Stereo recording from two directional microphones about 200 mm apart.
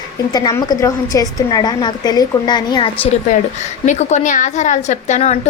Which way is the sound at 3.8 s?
35° left (ahead or behind).